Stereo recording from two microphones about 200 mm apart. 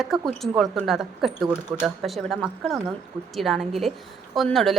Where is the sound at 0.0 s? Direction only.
Centre (ahead or behind).